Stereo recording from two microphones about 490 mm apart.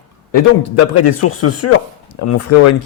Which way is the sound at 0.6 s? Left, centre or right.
Left.